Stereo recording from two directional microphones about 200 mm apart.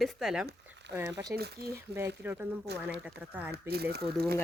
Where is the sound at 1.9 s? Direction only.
10° right (ahead or behind).